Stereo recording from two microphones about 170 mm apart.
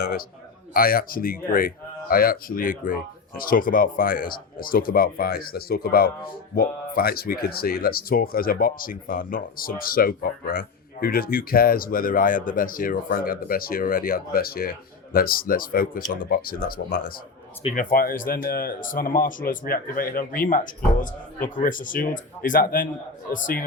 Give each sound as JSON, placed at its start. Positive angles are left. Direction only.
{"t": 0.0, "sound": "a man's voice", "side_deg": 60}